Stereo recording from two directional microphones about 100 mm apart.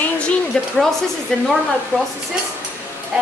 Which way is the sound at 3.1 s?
10° right (ahead or behind).